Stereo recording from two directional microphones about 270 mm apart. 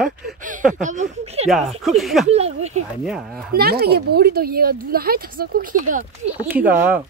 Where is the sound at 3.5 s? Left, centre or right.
Right.